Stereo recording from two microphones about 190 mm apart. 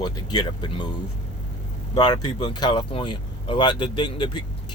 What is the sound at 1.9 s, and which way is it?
Speech, 20° left (ahead or behind).